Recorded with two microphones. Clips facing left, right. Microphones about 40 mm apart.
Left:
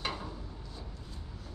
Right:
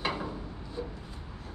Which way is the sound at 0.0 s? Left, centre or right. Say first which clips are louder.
Right 5 dB; right.